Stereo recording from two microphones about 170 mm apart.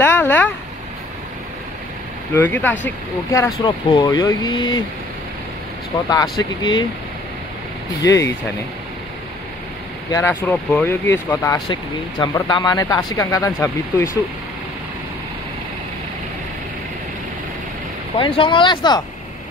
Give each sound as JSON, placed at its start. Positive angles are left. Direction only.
{"t": 0.0, "sound": "a sound", "side_deg": 10}
{"t": 2.3, "sound": "speech", "side_deg": 10}
{"t": 6.0, "sound": "speech", "side_deg": 20}
{"t": 10.1, "sound": "speech", "side_deg": 15}
{"t": 11.6, "sound": "speech", "side_deg": 25}
{"t": 18.1, "sound": "speech", "side_deg": 30}